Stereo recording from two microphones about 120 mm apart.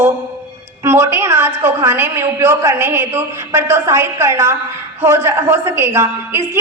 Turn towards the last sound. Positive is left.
turn(degrees=-20)  # may be behind; listen again after turning